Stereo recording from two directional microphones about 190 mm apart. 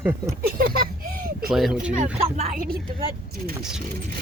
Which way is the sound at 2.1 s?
35° right (ahead or behind).